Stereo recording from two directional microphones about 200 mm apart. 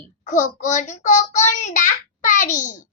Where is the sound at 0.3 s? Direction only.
40° left (ahead or behind).